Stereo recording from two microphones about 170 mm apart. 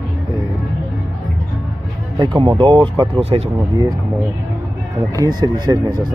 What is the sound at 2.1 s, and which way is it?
Speech, 30° right (ahead or behind).